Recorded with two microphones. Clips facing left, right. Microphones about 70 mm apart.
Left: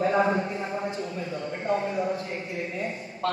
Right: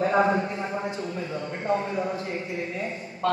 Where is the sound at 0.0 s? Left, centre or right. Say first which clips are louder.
Right 1 dB; right.